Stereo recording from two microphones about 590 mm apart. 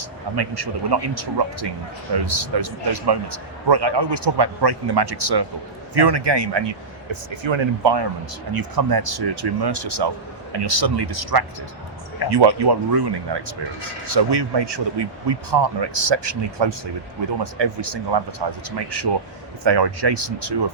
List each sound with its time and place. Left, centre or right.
0.3 s a man's voice: right
8.5 s a man's voice: right